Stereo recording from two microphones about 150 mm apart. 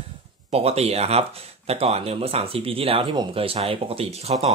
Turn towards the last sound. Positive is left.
turn(degrees=-45)  # may be behind; listen again after turning